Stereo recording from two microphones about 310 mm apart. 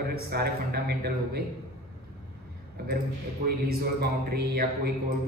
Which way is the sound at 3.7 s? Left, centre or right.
Right.